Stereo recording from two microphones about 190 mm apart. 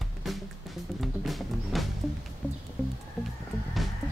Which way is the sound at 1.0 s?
Centre (ahead or behind).